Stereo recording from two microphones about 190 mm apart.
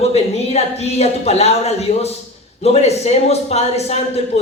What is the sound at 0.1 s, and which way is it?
A man's voice, 35° left (ahead or behind).